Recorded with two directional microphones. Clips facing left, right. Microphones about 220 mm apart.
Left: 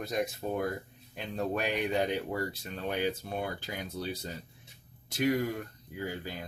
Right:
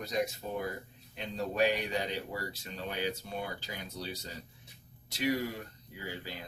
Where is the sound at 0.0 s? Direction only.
55° left (ahead or behind).